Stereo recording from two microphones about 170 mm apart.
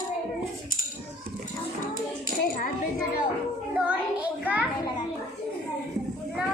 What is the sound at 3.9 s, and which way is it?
Child singing, 10° right (ahead or behind).